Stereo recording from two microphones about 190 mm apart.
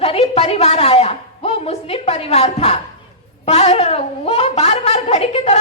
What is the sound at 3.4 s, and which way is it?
A woman's voice, 35° left (ahead or behind).